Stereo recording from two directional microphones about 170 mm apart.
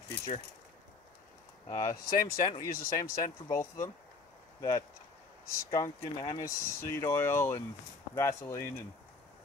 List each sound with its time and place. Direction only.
1.7 s speech: 20° left (ahead or behind)